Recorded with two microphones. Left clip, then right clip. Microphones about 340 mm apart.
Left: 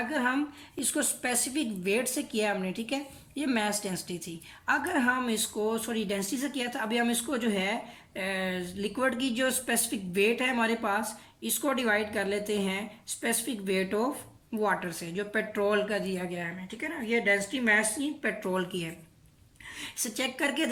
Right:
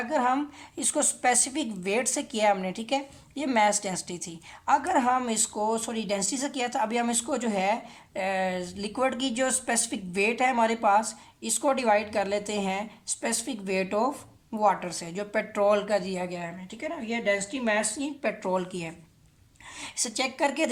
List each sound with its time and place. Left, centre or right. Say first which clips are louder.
0.1 s a woman's voice: right 8 dB; centre